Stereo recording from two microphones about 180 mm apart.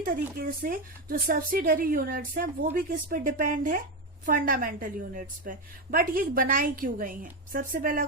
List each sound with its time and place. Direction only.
0.3 s a woman's voice: 55° right (ahead or behind)